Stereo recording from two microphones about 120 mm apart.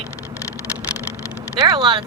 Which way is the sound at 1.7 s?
45° right (ahead or behind).